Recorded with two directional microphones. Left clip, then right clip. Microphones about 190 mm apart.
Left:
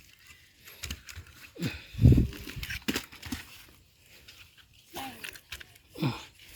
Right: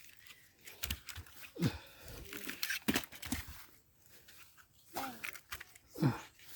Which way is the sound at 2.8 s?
45° right (ahead or behind).